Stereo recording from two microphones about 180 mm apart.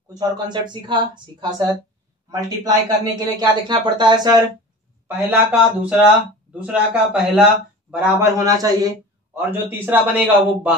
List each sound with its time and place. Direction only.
0.1 s speech: 25° right (ahead or behind)
5.0 s speech: 5° right (ahead or behind)
7.9 s a man's voice: 15° right (ahead or behind)